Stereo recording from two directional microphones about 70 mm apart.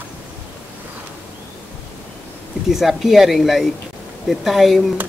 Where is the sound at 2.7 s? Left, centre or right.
Centre.